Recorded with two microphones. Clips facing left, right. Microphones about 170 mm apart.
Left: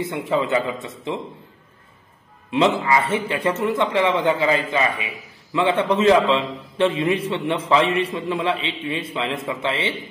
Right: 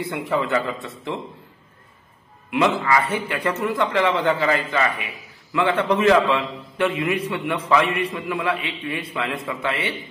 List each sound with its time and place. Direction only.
0.0 s speech: 20° left (ahead or behind)
2.5 s speech: 25° left (ahead or behind)